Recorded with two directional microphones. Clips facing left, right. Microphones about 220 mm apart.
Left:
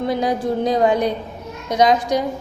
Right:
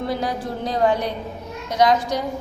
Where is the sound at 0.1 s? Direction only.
15° left (ahead or behind).